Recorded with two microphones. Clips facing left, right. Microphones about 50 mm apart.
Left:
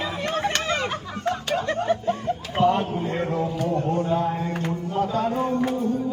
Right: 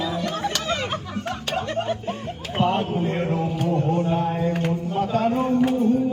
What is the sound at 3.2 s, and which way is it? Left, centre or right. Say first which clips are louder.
Music: right 1 dB; right.